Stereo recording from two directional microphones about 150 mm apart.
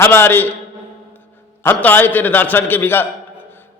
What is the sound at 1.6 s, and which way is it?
A man's voice, 15° left (ahead or behind).